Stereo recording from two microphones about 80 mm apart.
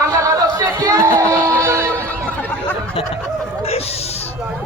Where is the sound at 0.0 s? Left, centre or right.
Right.